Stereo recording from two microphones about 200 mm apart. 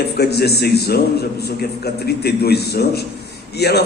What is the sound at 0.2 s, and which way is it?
A man's voice, 55° left (ahead or behind).